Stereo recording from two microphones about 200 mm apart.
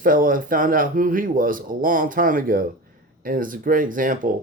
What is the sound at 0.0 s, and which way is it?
Speech, 45° right (ahead or behind).